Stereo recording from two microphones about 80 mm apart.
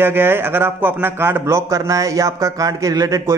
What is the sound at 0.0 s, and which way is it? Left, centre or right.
A man's voice, right.